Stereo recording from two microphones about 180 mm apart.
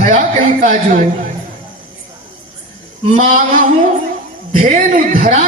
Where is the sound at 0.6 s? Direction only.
45° right (ahead or behind).